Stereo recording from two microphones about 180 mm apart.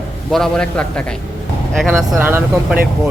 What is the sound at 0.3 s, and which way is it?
Speech, centre (ahead or behind).